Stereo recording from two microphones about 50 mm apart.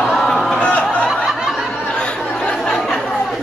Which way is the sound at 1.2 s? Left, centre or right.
Centre.